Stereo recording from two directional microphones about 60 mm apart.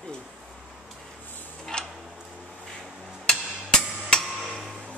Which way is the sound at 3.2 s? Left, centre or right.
Centre.